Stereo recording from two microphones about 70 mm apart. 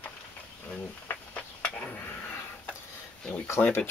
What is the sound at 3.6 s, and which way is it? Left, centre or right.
Speech, left.